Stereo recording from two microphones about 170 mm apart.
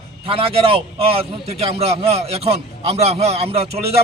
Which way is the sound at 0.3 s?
35° right (ahead or behind).